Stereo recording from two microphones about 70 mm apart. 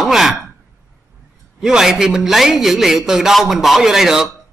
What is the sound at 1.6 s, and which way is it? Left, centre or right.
A man's voice, centre.